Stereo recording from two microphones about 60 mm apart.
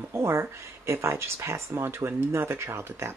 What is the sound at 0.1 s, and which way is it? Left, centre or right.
Speech, right.